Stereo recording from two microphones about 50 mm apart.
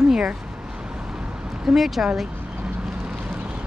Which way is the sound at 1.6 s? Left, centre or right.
Centre.